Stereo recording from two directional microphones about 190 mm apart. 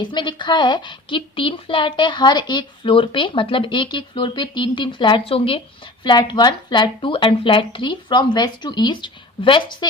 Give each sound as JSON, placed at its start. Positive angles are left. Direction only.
{"t": 0.0, "sound": "a woman's voice", "side_deg": 25}